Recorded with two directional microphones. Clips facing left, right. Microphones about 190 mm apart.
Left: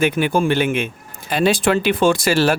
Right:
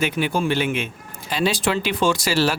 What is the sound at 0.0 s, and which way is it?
Speech, 50° left (ahead or behind).